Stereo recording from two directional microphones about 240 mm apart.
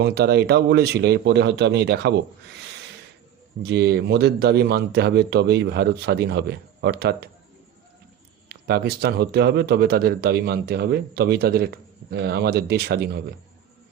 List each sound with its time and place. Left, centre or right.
0.0 s speech: right
3.6 s speech: right
8.4 s speech: right